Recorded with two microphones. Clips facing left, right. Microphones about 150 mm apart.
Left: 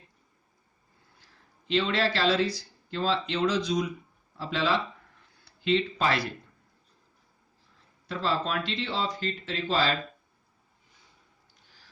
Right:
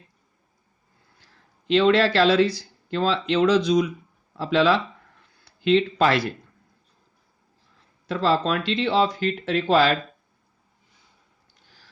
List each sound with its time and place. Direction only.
1.6 s speech: 80° right
8.0 s speech: 90° right; by 9.9 s 65° right (ahead or behind)